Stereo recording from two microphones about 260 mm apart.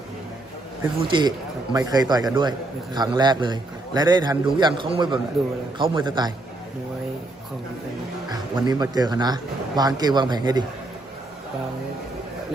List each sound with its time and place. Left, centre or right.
1.0 s a man's voice: centre
8.3 s a man's voice: centre